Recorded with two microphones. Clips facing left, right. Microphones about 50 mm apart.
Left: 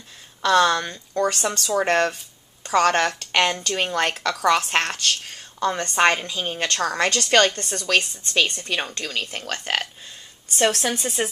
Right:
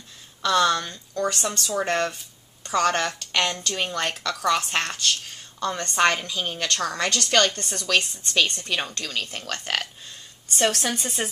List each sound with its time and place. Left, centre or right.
0.4 s a woman's voice: centre
1.1 s a woman's voice: left
3.3 s a woman's voice: left
5.6 s a woman's voice: left
6.7 s a woman's voice: left
7.6 s a woman's voice: centre